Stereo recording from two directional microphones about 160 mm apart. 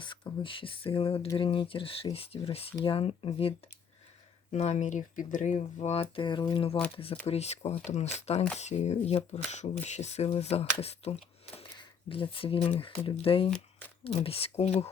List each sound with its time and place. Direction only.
0.0 s speech: 30° left (ahead or behind)
4.5 s speech: 45° left (ahead or behind)
13.5 s speech: 10° left (ahead or behind)
14.3 s speech: 40° left (ahead or behind)